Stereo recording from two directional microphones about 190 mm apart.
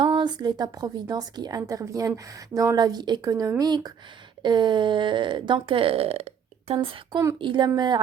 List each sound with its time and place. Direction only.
0.0 s a woman's voice: 25° right (ahead or behind)